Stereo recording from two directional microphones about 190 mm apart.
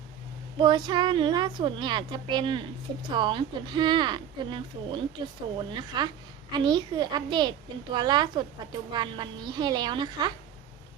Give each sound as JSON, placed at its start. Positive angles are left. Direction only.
{"t": 0.6, "sound": "speech", "side_deg": -25}